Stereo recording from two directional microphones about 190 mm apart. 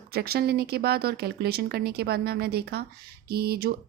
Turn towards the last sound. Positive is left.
turn(degrees=-55)  # may be behind; listen again after turning